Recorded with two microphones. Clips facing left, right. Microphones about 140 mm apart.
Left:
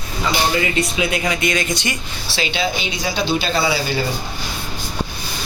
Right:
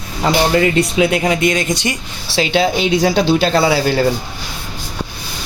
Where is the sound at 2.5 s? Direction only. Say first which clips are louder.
Right 11 dB; 60° right (ahead or behind).